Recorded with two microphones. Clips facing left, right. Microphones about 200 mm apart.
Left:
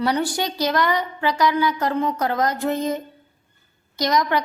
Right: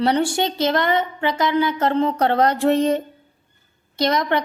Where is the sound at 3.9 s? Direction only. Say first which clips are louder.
Right 1 dB; 30° right (ahead or behind).